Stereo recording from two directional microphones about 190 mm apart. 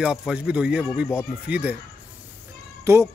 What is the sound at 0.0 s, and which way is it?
Speech, 5° right (ahead or behind).